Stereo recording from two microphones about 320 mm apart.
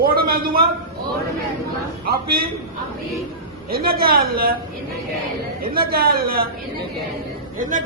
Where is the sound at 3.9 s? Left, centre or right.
Right.